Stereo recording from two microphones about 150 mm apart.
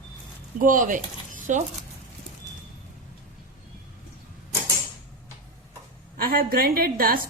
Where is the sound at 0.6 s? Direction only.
65° right (ahead or behind).